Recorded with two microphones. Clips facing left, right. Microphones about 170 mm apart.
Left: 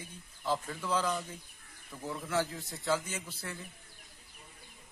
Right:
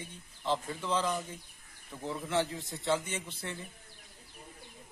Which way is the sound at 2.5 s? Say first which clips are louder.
Right 1 dB; centre (ahead or behind).